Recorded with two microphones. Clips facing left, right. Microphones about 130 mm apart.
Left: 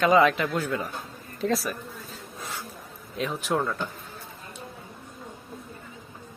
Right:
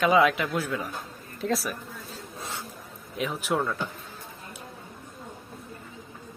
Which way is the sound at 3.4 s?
Centre (ahead or behind).